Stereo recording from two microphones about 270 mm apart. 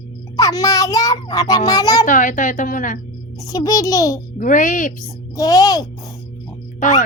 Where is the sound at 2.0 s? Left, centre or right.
Left.